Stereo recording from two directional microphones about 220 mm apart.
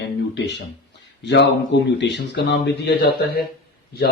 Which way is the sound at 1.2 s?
50° left (ahead or behind).